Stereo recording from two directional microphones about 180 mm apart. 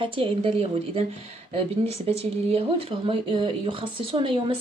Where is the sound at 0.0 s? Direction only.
30° right (ahead or behind).